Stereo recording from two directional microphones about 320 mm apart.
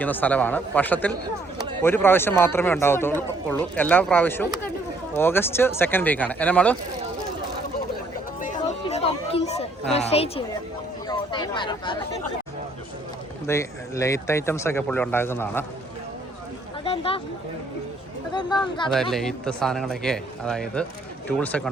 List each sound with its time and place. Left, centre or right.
0.0 s a man's voice: centre
8.4 s chatter: left
11.1 s speech: centre
13.5 s a man's voice: centre
16.8 s a sound: centre
18.3 s a man's voice: centre
19.1 s speech: centre